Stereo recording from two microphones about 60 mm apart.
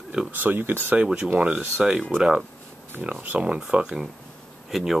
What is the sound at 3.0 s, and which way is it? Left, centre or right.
Speech, right.